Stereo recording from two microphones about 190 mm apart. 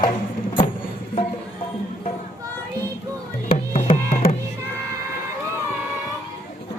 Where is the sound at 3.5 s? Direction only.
30° left (ahead or behind).